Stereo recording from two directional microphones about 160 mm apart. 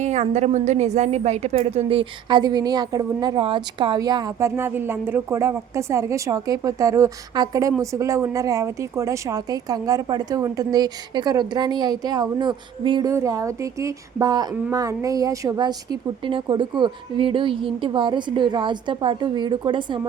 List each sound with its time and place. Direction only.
0.0 s a woman's voice: 45° right (ahead or behind); by 20.0 s 30° right (ahead or behind)